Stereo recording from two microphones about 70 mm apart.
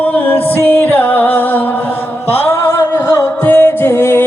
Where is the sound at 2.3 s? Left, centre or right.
Left.